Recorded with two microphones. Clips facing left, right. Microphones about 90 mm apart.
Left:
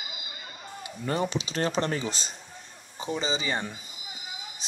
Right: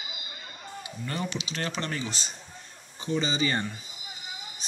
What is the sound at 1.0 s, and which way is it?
Speech, 35° left (ahead or behind).